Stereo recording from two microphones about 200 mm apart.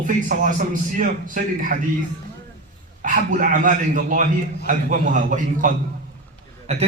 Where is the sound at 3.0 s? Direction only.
40° right (ahead or behind).